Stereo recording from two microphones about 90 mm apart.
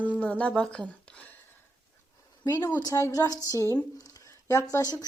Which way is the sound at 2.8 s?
35° left (ahead or behind).